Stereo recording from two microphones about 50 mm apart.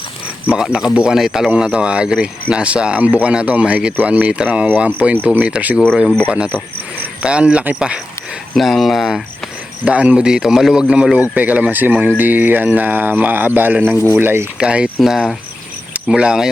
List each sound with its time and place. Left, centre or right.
0.5 s a man's voice: centre
7.2 s speech: right
8.5 s speech: centre
9.8 s speech: right
10.2 s a man's voice: centre
10.8 s speech: right
14.6 s speech: right
15.0 s a man's voice: centre
15.9 s speech: right